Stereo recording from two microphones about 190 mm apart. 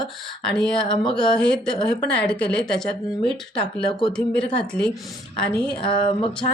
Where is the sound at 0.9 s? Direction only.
25° left (ahead or behind).